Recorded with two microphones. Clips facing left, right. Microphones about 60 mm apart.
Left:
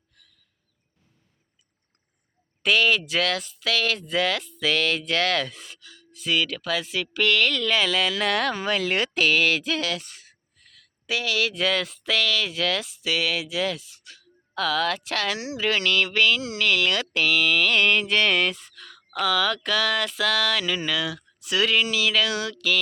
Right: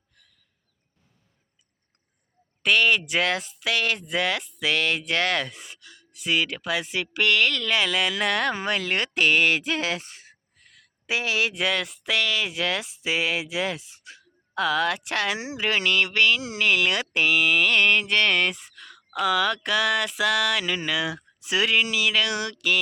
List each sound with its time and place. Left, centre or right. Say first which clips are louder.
0.2 s a sound: left 1 dB; centre
2.6 s speech: even; centre
3.0 s speech: even; centre
18.5 s fowl: left 1 dB; centre
19.2 s speech: right 1 dB; centre
21.0 s a sound: right 1 dB; right
21.6 s speech: even; centre